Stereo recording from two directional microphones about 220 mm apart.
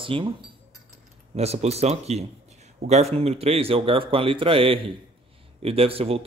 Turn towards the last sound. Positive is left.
turn(degrees=-25)  # may be behind; listen again after turning